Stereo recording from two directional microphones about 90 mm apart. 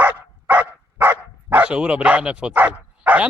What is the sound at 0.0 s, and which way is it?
Speech, 20° right (ahead or behind).